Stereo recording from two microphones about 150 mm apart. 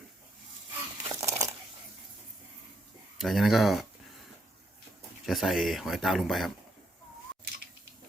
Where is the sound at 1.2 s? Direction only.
20° right (ahead or behind).